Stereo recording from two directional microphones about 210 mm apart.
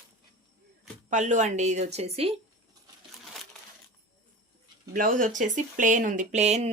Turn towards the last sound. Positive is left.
turn(degrees=-30)  # may be behind; listen again after turning